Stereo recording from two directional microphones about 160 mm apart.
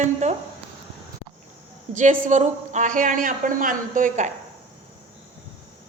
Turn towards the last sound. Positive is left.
turn(degrees=-55)  # may be behind; listen again after turning